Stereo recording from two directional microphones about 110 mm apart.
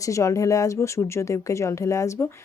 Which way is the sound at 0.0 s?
30° left (ahead or behind).